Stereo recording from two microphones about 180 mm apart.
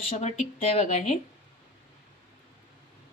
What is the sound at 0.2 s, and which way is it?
Speech, 35° left (ahead or behind).